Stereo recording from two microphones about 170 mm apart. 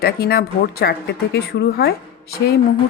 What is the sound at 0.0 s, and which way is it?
Speech, 65° left (ahead or behind).